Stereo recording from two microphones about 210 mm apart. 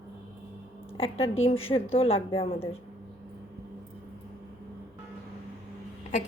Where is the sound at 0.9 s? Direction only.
25° left (ahead or behind).